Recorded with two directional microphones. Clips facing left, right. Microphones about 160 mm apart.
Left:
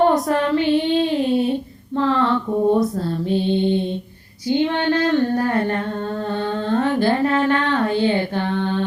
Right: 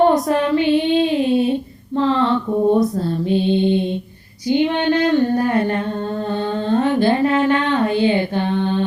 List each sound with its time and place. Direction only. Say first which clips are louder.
0.0 s child singing: right 2 dB; 15° right (ahead or behind)
2.0 s female singing: right 2 dB; 20° right (ahead or behind)
3.2 s mantra: right 2 dB; 15° right (ahead or behind)
4.4 s female singing: right 2 dB; 15° right (ahead or behind)
6.7 s a sound: right 2 dB; 20° right (ahead or behind)